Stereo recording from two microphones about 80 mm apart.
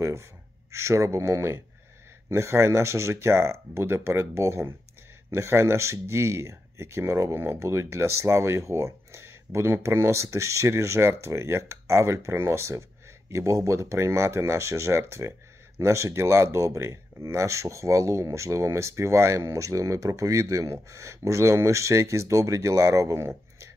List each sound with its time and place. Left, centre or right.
0.0 s speech: right